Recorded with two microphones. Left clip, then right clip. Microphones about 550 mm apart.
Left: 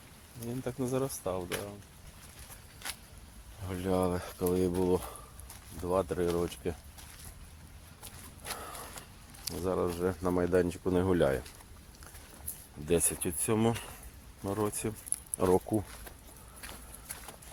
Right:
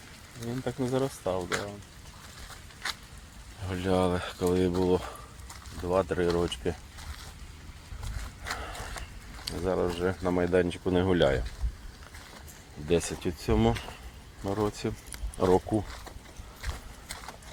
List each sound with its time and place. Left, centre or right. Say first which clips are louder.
0.6 s speech: right 4 dB; left
3.7 s speech: right 4 dB; left
8.4 s horse: right 5 dB; left
9.5 s speech: right 3 dB; left
12.9 s speech: right 3 dB; left